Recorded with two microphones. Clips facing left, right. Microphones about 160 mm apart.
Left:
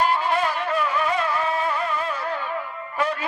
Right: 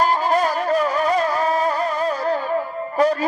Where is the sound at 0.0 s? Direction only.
40° right (ahead or behind).